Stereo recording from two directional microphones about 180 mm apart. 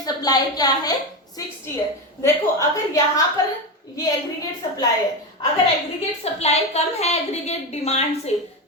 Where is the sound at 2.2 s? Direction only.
15° left (ahead or behind).